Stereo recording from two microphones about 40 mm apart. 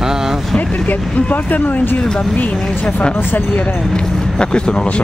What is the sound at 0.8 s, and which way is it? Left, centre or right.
Speech, left.